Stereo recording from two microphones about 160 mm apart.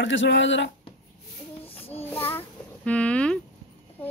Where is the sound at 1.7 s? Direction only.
40° left (ahead or behind).